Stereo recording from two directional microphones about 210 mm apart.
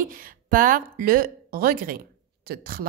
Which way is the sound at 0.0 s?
40° right (ahead or behind).